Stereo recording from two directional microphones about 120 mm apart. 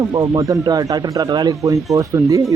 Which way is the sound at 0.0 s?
30° right (ahead or behind).